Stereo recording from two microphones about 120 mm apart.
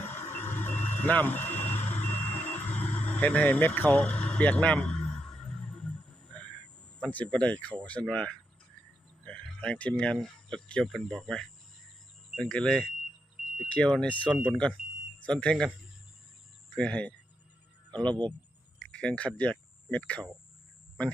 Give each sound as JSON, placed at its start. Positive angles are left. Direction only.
{"t": 0.0, "sound": "vehicle", "side_deg": 20}
{"t": 6.3, "sound": "a sound", "side_deg": 10}
{"t": 7.0, "sound": "speech", "side_deg": 10}
{"t": 16.7, "sound": "speech", "side_deg": 10}